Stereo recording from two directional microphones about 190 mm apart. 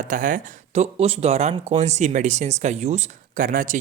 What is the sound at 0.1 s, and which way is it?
Speech, 45° right (ahead or behind).